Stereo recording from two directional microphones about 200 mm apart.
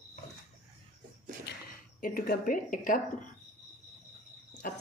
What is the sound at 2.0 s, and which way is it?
A woman's voice, 45° left (ahead or behind).